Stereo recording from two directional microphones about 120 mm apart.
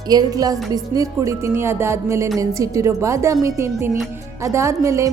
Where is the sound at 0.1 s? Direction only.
30° right (ahead or behind).